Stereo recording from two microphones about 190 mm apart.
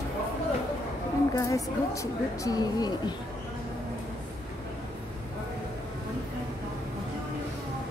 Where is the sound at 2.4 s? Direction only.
20° left (ahead or behind).